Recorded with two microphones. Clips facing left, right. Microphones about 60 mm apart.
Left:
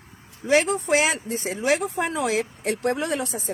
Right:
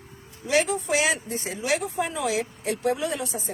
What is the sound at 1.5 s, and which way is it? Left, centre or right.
A woman's voice, left.